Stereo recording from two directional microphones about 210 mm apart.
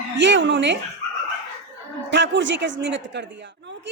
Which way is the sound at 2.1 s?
60° right (ahead or behind).